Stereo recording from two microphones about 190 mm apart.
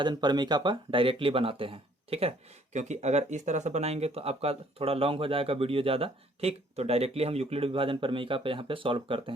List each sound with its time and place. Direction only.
0.0 s speech: 20° right (ahead or behind)